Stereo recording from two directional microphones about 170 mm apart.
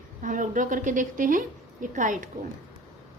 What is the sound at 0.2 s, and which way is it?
A woman's voice, 50° right (ahead or behind).